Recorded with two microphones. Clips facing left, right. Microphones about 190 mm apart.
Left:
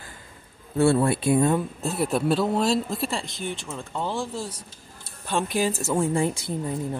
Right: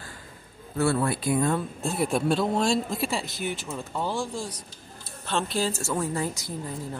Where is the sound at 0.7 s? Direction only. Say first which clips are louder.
Left 5 dB; 25° left (ahead or behind).